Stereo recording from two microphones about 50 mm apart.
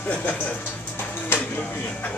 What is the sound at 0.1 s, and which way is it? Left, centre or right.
Speech, left.